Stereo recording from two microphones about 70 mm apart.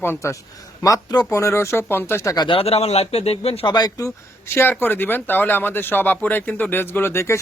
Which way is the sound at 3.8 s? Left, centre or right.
Left.